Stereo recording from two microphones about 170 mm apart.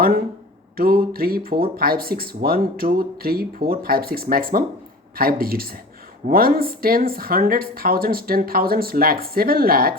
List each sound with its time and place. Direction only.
0.8 s speech: 60° right (ahead or behind)